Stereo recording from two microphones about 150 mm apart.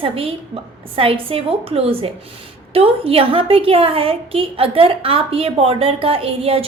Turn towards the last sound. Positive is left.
turn(degrees=-40)  # may be behind; listen again after turning